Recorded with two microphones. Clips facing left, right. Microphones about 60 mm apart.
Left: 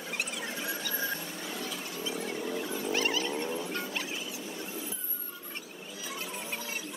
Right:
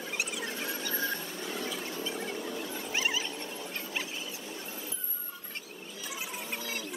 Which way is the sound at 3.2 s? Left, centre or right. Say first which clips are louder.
Left 6 dB; left.